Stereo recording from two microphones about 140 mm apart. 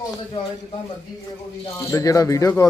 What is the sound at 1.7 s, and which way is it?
Speech, 20° left (ahead or behind).